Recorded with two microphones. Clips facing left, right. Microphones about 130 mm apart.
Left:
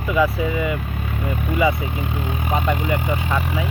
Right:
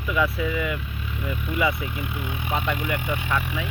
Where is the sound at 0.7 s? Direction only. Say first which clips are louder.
Left 6 dB; 60° left (ahead or behind).